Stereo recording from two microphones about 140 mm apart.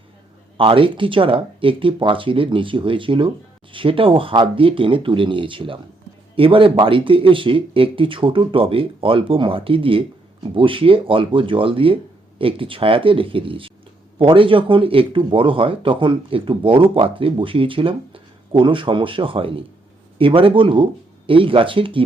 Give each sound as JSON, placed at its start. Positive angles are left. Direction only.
{"t": 0.5, "sound": "speech", "side_deg": -40}